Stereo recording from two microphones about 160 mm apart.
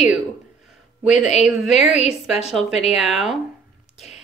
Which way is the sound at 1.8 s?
45° left (ahead or behind).